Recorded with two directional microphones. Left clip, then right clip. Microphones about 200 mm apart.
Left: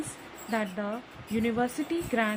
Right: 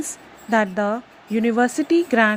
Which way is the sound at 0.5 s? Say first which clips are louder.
Right 12 dB; 30° right (ahead or behind).